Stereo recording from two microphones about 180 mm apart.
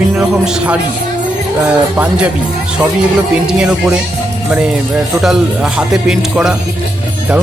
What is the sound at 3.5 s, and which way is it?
Speech, 5° right (ahead or behind).